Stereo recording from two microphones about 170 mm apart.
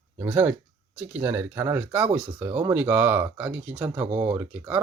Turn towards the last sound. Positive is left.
turn(degrees=-10)  # may be behind; listen again after turning